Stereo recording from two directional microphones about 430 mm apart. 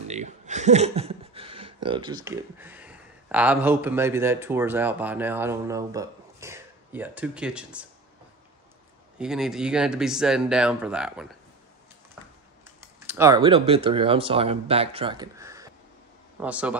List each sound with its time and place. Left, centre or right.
0.1 s speech: centre
9.2 s speech: centre
12.2 s a sound: centre
13.0 s speech: centre